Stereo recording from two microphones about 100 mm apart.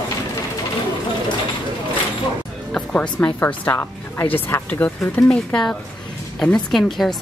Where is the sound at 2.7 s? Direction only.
10° left (ahead or behind).